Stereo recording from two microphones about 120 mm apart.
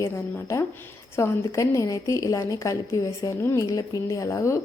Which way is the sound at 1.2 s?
25° left (ahead or behind).